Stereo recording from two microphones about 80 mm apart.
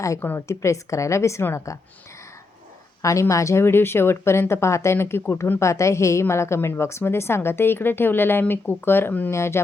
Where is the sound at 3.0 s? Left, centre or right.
Left.